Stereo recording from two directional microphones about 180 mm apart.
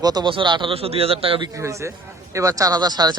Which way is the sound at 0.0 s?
20° right (ahead or behind).